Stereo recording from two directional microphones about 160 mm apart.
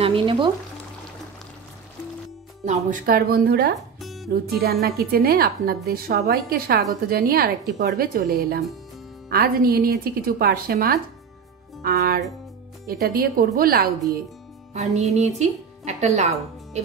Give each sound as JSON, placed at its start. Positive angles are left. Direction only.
{"t": 0.0, "sound": "speech", "side_deg": -35}
{"t": 2.6, "sound": "speech", "side_deg": -50}
{"t": 3.7, "sound": "music", "side_deg": 0}
{"t": 4.3, "sound": "a woman's voice", "side_deg": -75}
{"t": 14.7, "sound": "music", "side_deg": -45}
{"t": 15.1, "sound": "speech", "side_deg": -45}